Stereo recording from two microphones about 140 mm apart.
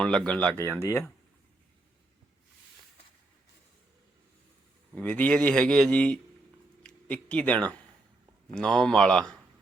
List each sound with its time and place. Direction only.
0.0 s a man's voice: 5° left (ahead or behind)
4.9 s a man's voice: 10° left (ahead or behind)